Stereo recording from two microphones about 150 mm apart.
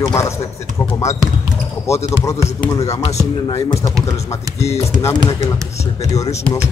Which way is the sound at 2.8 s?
20° left (ahead or behind).